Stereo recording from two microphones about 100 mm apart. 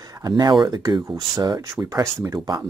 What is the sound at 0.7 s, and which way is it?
Speech, 45° right (ahead or behind).